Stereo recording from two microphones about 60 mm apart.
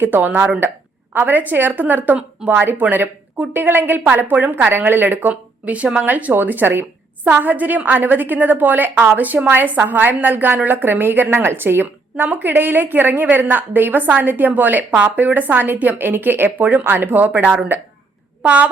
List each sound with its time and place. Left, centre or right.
0.0 s a woman's voice: right
5.3 s a woman's voice: right